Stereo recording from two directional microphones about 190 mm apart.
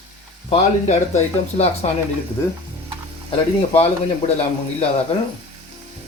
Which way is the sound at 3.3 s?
30° left (ahead or behind).